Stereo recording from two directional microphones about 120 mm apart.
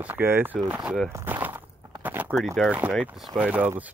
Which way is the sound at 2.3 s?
Centre (ahead or behind).